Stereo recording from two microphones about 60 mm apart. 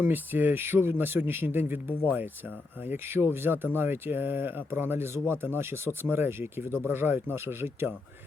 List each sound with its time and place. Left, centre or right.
0.0 s speech: right